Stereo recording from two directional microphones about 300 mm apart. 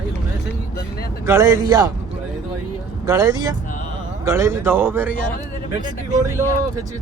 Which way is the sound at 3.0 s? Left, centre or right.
Centre.